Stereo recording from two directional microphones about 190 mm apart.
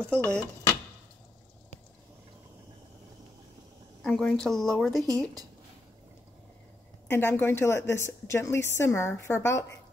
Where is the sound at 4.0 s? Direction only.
5° left (ahead or behind).